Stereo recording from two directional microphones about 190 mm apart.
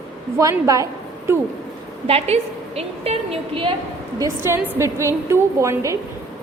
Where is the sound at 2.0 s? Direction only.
35° right (ahead or behind).